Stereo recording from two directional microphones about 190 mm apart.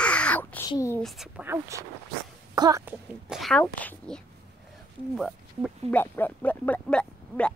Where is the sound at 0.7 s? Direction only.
15° left (ahead or behind).